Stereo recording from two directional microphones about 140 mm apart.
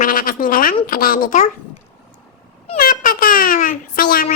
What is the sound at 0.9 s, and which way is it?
Speech, 85° left.